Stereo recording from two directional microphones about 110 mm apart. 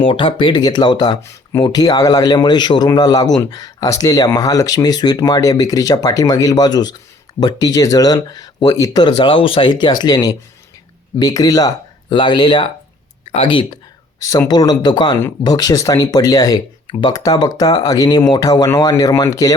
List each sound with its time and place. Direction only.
0.0 s speech: 55° left (ahead or behind); by 11.7 s 35° left (ahead or behind)
12.0 s speech: 45° left (ahead or behind)
13.3 s speech: 60° left (ahead or behind)
14.2 s speech: 30° left (ahead or behind)